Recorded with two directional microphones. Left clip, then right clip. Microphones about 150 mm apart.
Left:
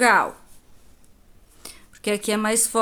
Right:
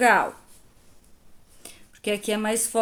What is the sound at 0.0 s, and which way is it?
Speech, 25° left (ahead or behind).